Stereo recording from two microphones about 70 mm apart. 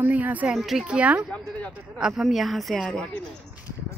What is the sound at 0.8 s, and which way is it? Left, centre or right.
Speech, centre.